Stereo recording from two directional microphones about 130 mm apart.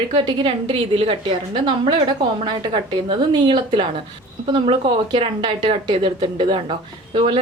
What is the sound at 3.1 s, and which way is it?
Speech, 35° right (ahead or behind).